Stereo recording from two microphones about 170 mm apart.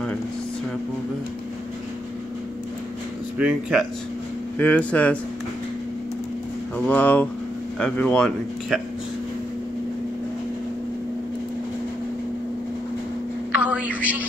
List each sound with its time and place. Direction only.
3.3 s speech: 5° right (ahead or behind)
4.6 s speech: 10° left (ahead or behind)
6.9 s speech: 10° left (ahead or behind)
13.6 s a sound: 10° right (ahead or behind)